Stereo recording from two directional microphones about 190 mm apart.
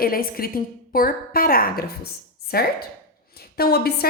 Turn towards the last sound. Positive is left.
turn(degrees=55)  # may be behind; listen again after turning